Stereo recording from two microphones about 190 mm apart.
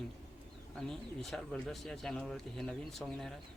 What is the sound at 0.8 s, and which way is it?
Speech, centre (ahead or behind).